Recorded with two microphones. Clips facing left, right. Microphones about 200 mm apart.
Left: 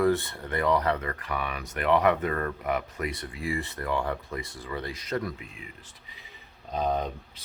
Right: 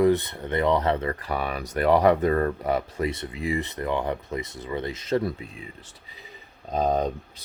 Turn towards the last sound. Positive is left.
turn(degrees=-40)  # may be behind; listen again after turning